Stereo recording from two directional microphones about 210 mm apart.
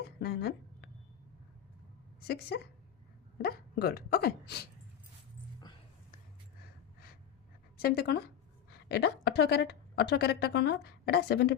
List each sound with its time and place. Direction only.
0.2 s a sound: 50° left (ahead or behind)
2.2 s a woman's voice: 50° left (ahead or behind)
7.8 s a woman's voice: 45° left (ahead or behind)